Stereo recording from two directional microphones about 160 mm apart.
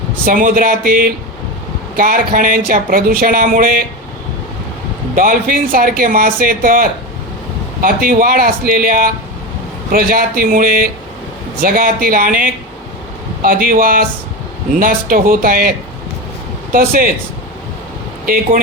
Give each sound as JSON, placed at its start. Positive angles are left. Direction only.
{"t": 0.3, "sound": "speech", "side_deg": -60}
{"t": 5.1, "sound": "speech", "side_deg": -60}
{"t": 16.7, "sound": "speech", "side_deg": -65}